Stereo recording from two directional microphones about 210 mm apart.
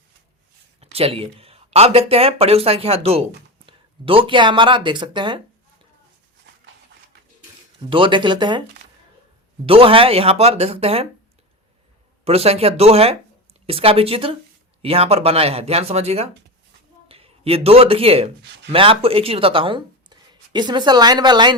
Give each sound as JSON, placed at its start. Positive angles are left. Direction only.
{"t": 0.8, "sound": "speech", "side_deg": -30}
{"t": 7.8, "sound": "speech", "side_deg": -25}
{"t": 9.6, "sound": "speech", "side_deg": -25}
{"t": 12.2, "sound": "speech", "side_deg": -30}